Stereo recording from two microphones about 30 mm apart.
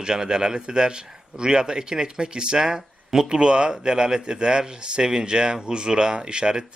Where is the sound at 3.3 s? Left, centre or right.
Right.